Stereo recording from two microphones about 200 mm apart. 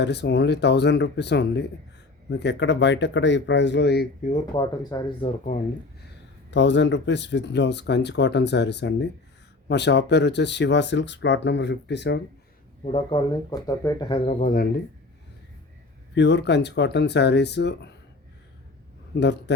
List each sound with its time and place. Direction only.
0.0 s speech: 60° left (ahead or behind)
4.5 s speech: 20° left (ahead or behind)
6.5 s speech: 60° left (ahead or behind)
12.8 s speech: 30° left (ahead or behind)
14.4 s speech: 45° left (ahead or behind)
16.1 s speech: 60° left (ahead or behind)
19.2 s speech: 60° left (ahead or behind)